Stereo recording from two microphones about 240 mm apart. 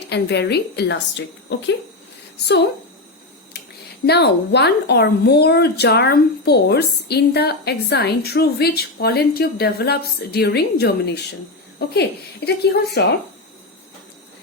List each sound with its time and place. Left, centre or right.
0.0 s a woman's voice: left
4.0 s a woman's voice: left